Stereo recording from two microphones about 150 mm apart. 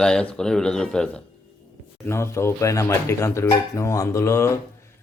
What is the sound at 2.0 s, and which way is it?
Speech, 15° left (ahead or behind).